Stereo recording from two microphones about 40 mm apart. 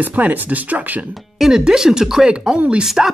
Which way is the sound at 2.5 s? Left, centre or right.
Right.